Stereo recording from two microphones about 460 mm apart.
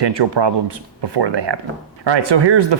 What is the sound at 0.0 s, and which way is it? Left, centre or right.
Speech, right.